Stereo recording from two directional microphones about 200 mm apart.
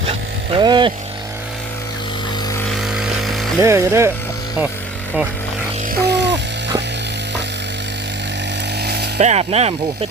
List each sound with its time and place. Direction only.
0.1 s a sound: 25° right (ahead or behind)
2.7 s music: centre (ahead or behind)
3.6 s speech: 15° right (ahead or behind)
5.9 s music: 55° right (ahead or behind)
8.8 s chainsaw: 55° right (ahead or behind)
9.1 s speech: 30° right (ahead or behind)